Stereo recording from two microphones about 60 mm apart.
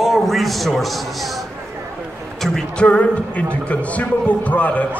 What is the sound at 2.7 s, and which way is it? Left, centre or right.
Speech, left.